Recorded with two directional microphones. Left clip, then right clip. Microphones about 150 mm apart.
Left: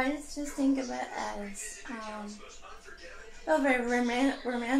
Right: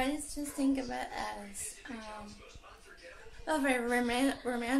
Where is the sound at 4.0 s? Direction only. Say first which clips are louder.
Left 2 dB; 10° right (ahead or behind).